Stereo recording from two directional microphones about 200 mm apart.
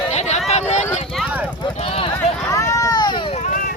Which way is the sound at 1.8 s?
30° left (ahead or behind).